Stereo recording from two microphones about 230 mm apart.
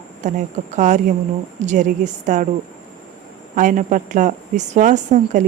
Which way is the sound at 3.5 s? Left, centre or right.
Right.